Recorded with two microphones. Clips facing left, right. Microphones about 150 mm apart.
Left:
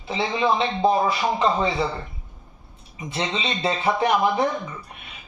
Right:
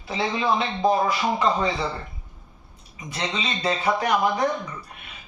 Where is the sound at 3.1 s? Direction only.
25° left (ahead or behind).